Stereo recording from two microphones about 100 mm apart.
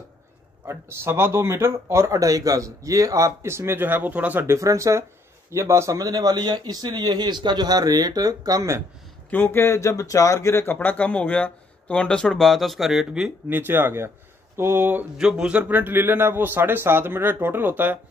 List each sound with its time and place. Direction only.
0.7 s speech: 25° right (ahead or behind)
4.6 s speech: 30° right (ahead or behind)
9.3 s speech: 20° left (ahead or behind); by 13.3 s 5° right (ahead or behind)
13.5 s speech: 20° right (ahead or behind)
15.1 s speech: 10° right (ahead or behind)